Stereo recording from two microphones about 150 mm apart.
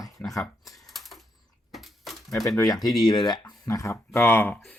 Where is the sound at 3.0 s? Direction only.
30° left (ahead or behind).